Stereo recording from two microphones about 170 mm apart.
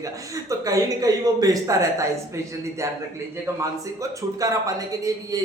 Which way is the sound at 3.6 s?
20° right (ahead or behind).